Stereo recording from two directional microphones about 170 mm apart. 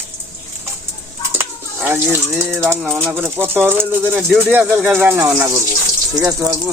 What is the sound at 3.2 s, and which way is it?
Speech, 15° right (ahead or behind).